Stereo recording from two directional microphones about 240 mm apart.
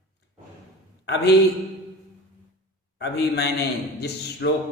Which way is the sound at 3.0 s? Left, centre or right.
Left.